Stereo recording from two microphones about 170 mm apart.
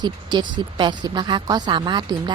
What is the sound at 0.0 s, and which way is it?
A woman's voice, 25° right (ahead or behind).